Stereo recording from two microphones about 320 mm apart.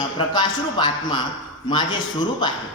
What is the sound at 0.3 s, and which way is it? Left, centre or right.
A man's voice, centre.